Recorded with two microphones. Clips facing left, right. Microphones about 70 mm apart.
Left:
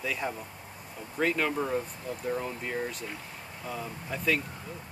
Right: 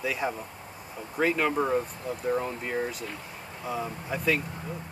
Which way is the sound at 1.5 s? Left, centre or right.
Right.